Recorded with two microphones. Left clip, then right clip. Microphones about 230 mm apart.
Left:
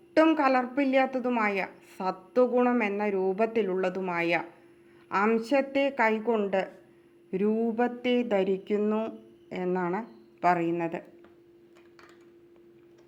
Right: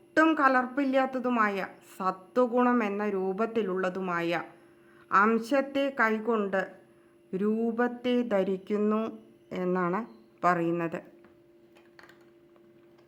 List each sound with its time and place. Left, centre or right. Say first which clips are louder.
0.1 s speech: even; centre